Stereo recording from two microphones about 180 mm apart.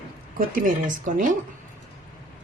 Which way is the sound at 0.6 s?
45° right (ahead or behind).